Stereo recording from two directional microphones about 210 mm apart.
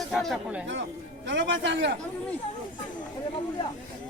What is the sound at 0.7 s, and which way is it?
A man's voice, 60° right (ahead or behind).